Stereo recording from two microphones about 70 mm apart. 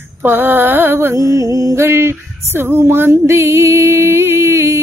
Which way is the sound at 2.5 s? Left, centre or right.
Right.